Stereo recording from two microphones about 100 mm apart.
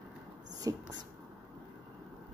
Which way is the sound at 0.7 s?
35° right (ahead or behind).